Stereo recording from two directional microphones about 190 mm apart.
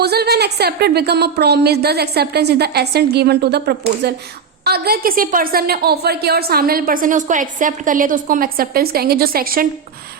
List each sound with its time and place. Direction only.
0.0 s a woman's voice: 60° right (ahead or behind)